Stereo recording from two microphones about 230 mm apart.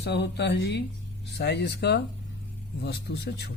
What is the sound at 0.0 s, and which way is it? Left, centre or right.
A man's voice, left.